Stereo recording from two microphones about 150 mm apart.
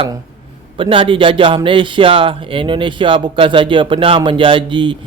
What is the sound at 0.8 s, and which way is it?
A man's voice, 35° right (ahead or behind).